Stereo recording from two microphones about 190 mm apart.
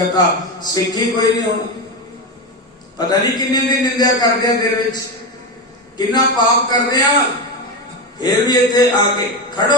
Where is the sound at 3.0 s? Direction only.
20° left (ahead or behind).